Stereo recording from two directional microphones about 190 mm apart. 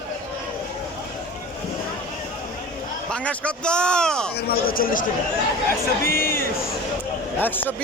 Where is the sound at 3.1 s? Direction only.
5° left (ahead or behind).